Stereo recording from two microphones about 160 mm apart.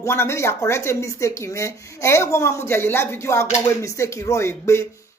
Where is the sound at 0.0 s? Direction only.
15° left (ahead or behind).